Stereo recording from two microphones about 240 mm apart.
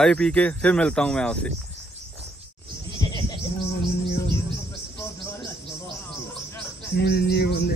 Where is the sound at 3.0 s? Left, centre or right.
Centre.